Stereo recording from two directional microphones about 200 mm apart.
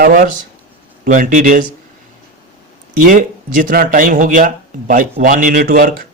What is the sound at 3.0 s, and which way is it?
A man's voice, 40° right (ahead or behind).